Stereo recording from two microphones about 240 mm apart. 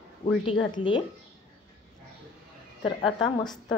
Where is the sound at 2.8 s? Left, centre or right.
Left.